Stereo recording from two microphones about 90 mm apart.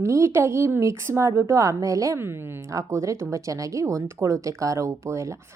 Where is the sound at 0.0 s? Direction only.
30° right (ahead or behind).